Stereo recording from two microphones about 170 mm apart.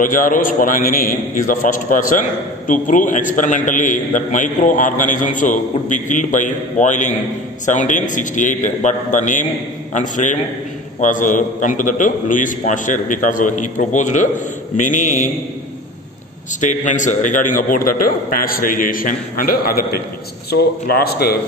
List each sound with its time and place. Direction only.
0.0 s a man's voice: 50° left (ahead or behind)
16.6 s a man's voice: 45° left (ahead or behind); by 21.4 s 65° left (ahead or behind)